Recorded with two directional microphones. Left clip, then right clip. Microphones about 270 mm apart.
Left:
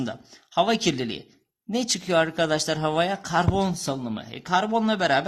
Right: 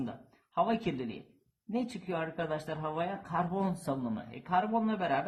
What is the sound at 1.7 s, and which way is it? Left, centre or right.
Speech, left.